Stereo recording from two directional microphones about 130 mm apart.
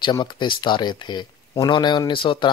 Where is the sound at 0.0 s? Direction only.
35° left (ahead or behind).